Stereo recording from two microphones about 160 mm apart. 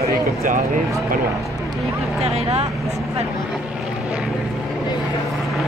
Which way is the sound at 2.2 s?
40° right (ahead or behind).